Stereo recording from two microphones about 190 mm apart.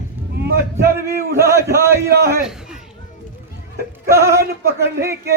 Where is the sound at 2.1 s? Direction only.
50° right (ahead or behind).